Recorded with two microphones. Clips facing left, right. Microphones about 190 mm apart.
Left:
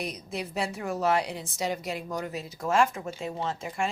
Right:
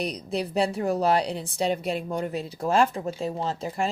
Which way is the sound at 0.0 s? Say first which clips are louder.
Right 6 dB; 35° right (ahead or behind).